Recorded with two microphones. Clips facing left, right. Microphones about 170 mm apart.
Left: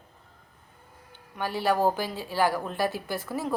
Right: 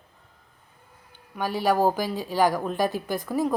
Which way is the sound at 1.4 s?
15° right (ahead or behind).